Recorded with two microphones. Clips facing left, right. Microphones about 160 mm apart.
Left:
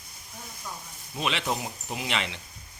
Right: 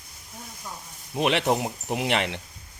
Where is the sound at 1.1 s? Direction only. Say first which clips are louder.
Right 7 dB; 60° right (ahead or behind).